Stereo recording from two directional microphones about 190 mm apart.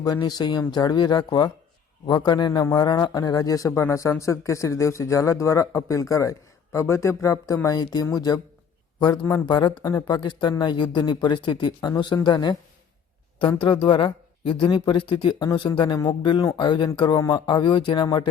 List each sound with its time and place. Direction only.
0.0 s a man's voice: 20° left (ahead or behind)